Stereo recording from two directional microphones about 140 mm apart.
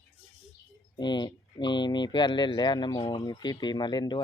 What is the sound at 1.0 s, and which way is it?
Speech, 30° left (ahead or behind).